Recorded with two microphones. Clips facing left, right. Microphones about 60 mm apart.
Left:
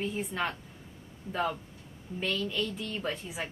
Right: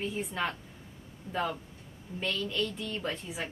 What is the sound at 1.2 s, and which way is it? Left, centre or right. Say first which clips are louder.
Speech: right 1 dB; centre.